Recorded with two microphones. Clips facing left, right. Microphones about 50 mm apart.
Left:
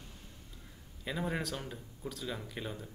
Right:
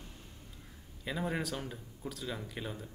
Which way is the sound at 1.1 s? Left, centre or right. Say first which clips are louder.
Even; centre.